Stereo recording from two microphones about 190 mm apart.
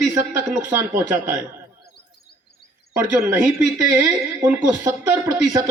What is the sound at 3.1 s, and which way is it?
Speech, 15° right (ahead or behind).